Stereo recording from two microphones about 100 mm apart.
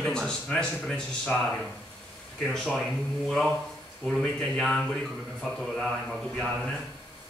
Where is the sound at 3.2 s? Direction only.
5° left (ahead or behind).